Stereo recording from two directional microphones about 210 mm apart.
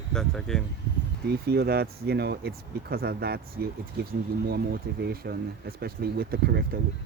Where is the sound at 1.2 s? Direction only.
50° right (ahead or behind).